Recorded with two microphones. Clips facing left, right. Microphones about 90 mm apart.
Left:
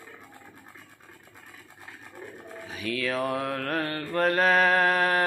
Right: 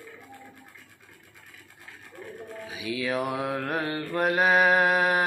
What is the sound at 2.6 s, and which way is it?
Mantra, 10° right (ahead or behind).